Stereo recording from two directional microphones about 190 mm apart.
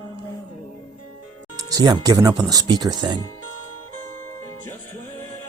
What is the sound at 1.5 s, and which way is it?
Speech, 20° right (ahead or behind).